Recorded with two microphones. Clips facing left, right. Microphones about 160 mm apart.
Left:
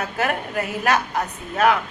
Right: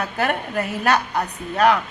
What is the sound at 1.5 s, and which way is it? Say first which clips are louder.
Speech: right 1 dB; 35° right (ahead or behind).